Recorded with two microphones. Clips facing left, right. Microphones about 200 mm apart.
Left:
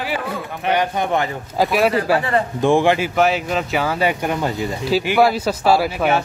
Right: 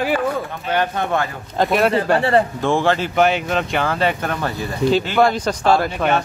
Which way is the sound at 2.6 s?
15° left (ahead or behind).